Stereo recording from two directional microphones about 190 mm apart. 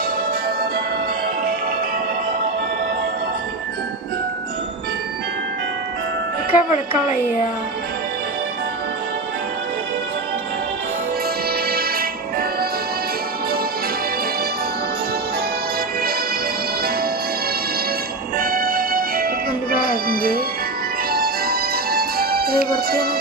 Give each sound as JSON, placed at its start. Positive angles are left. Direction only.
{"t": 6.5, "sound": "speech", "side_deg": -10}
{"t": 11.7, "sound": "music", "side_deg": -55}
{"t": 18.3, "sound": "music", "side_deg": -50}